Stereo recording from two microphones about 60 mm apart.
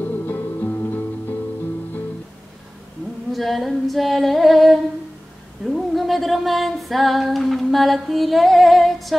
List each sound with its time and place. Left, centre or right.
0.0 s music: left
3.3 s female singing: centre
5.7 s a sound: centre